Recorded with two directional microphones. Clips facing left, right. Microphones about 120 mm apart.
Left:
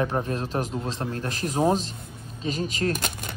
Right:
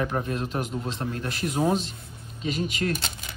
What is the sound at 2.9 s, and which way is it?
Speech, 50° left (ahead or behind).